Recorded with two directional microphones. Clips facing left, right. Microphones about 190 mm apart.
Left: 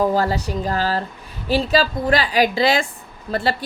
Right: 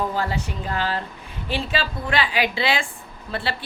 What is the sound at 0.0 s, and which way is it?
A woman's voice, 40° left (ahead or behind).